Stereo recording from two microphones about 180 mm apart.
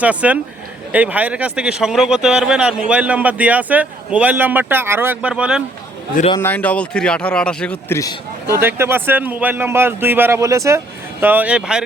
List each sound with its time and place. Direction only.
0.0 s a man's voice: 10° right (ahead or behind)
6.4 s speech: 10° left (ahead or behind)
7.9 s a man's voice: 20° left (ahead or behind)
8.5 s a man's voice: 15° right (ahead or behind)